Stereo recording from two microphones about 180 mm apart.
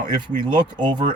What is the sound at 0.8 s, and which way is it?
Speech, 25° right (ahead or behind).